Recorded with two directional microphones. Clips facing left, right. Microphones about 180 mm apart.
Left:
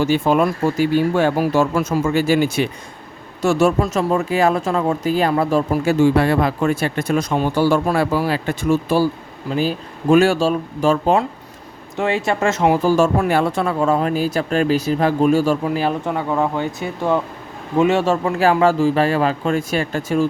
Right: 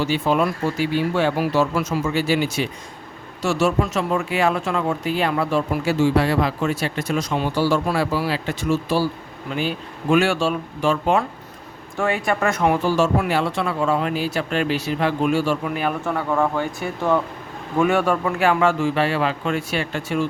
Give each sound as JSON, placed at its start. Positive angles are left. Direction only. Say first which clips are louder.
{"t": 0.0, "sound": "speech", "louder": "left 4 dB", "side_deg": 45}
{"t": 9.5, "sound": "speech", "louder": "left 5 dB", "side_deg": 35}
{"t": 11.9, "sound": "speech", "louder": "left 2 dB", "side_deg": 25}
{"t": 12.8, "sound": "speech", "louder": "left 4 dB", "side_deg": 45}
{"t": 16.0, "sound": "speech", "louder": "left 1 dB", "side_deg": 15}